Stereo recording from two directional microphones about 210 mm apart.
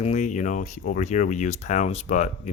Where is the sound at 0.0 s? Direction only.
35° left (ahead or behind).